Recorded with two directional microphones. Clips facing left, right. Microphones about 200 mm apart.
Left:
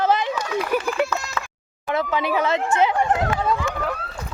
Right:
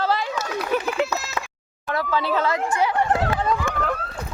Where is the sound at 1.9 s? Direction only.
20° left (ahead or behind).